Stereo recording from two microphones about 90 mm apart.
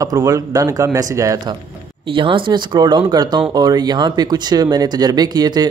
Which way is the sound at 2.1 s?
70° right (ahead or behind).